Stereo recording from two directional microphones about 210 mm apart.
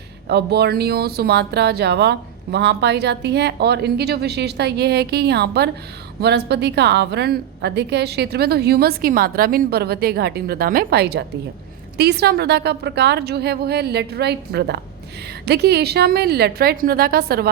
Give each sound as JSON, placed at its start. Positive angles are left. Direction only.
{"t": 0.3, "sound": "speech", "side_deg": -50}